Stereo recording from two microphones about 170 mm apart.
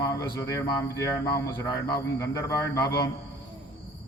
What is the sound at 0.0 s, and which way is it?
A man's voice, 20° left (ahead or behind).